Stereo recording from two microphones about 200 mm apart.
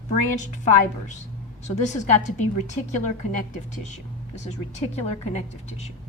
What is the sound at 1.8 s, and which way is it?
A woman's voice, 35° left (ahead or behind).